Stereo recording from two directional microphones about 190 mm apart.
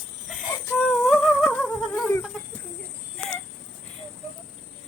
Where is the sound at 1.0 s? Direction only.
5° left (ahead or behind).